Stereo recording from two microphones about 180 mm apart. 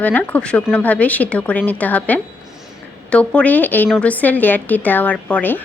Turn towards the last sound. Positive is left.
turn(degrees=10)  # may be behind; listen again after turning